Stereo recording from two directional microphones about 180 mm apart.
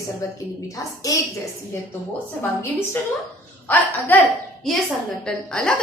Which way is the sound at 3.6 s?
10° left (ahead or behind).